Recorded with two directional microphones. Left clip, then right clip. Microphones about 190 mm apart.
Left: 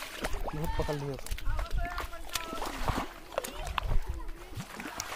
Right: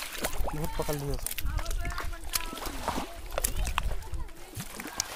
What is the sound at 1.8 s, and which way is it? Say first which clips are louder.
Run: left 1 dB; 35° right (ahead or behind).